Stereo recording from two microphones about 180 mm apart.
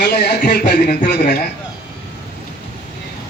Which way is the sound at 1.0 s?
40° left (ahead or behind).